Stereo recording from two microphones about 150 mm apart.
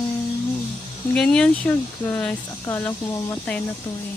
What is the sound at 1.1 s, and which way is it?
Speech, 5° left (ahead or behind).